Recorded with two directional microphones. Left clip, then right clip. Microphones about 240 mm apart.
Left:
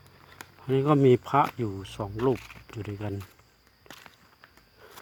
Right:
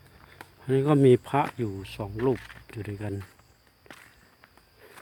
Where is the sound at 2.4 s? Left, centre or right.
Left.